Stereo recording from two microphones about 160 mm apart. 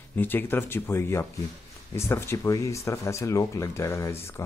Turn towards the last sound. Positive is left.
turn(degrees=15)  # may be behind; listen again after turning